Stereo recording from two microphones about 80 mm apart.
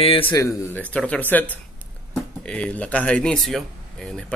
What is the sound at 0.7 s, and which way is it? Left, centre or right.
Speech, centre.